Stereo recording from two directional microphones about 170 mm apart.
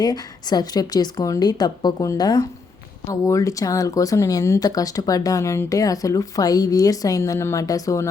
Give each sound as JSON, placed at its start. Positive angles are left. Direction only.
{"t": 0.0, "sound": "speech", "side_deg": 25}